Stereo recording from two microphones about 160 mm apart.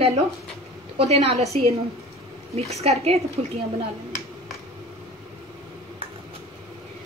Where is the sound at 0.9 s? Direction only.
40° right (ahead or behind).